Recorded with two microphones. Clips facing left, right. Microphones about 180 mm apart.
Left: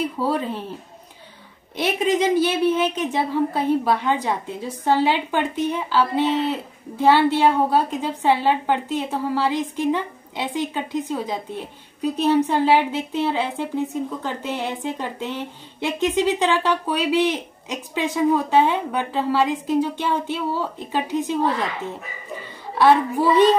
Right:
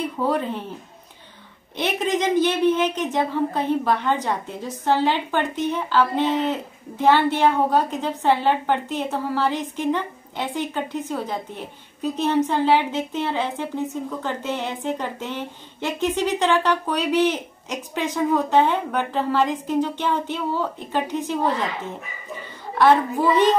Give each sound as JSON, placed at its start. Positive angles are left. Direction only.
{"t": 0.2, "sound": "a woman's voice", "side_deg": 10}
{"t": 1.8, "sound": "a woman's voice", "side_deg": 10}